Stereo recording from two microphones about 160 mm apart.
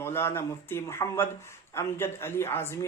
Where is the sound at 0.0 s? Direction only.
15° left (ahead or behind).